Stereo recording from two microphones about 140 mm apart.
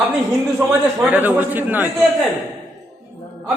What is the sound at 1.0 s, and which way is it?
Speech, 10° right (ahead or behind).